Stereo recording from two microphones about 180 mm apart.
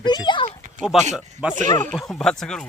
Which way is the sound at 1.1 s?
5° right (ahead or behind).